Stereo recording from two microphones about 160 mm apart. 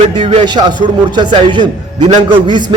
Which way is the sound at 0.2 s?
30° right (ahead or behind).